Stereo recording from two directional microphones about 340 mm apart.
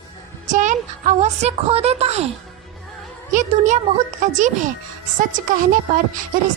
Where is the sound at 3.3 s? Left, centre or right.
Right.